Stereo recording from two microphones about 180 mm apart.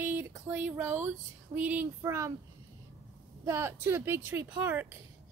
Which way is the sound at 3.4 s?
15° right (ahead or behind).